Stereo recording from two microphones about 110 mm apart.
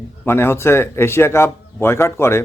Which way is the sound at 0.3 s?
20° left (ahead or behind).